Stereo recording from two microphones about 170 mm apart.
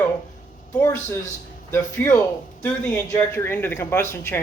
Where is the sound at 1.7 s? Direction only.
15° left (ahead or behind).